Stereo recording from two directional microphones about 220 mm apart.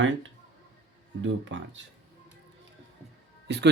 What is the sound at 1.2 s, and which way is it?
Speech, 55° right (ahead or behind).